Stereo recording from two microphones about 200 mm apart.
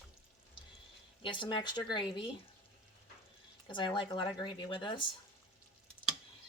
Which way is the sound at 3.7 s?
25° left (ahead or behind).